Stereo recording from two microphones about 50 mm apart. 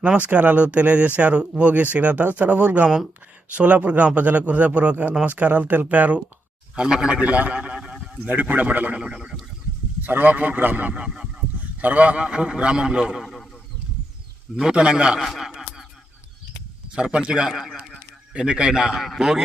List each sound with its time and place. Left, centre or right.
0.0 s a man's voice: right
6.7 s a man's voice: centre
7.2 s a man's voice: right
8.2 s speech: right
9.0 s speech: centre
10.0 s speech: right
11.1 s a sound: centre
11.6 s a man's voice: right
13.1 s a sound: centre
14.5 s a man's voice: centre
15.2 s speech: centre
16.9 s a man's voice: centre